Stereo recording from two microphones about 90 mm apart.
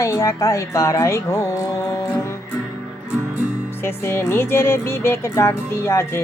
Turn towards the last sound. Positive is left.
turn(degrees=30)  # may be behind; listen again after turning